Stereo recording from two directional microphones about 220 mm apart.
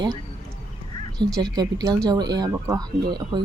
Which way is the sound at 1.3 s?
20° right (ahead or behind).